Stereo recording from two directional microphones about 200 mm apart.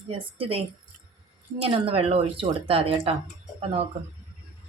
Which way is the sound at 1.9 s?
30° right (ahead or behind).